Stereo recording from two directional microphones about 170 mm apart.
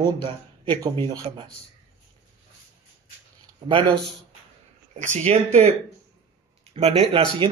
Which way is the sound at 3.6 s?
30° right (ahead or behind).